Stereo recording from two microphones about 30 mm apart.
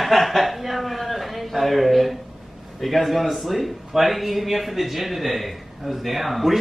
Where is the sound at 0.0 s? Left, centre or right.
Centre.